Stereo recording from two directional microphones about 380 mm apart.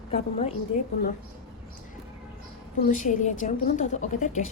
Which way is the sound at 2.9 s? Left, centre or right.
Centre.